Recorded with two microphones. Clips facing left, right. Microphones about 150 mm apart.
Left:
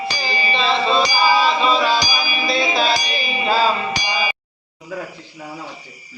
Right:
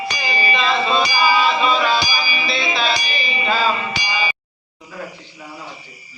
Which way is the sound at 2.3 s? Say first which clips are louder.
Left 3 dB; 45° left (ahead or behind).